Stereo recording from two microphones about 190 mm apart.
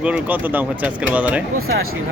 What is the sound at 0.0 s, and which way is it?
Speech, 10° right (ahead or behind).